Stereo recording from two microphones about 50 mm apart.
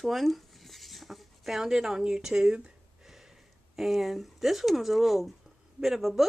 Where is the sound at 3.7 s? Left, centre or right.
Centre.